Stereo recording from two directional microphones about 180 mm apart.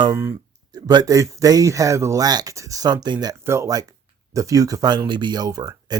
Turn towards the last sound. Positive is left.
turn(degrees=-20)  # may be behind; listen again after turning